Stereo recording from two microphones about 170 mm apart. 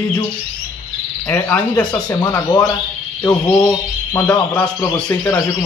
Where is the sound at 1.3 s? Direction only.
15° left (ahead or behind).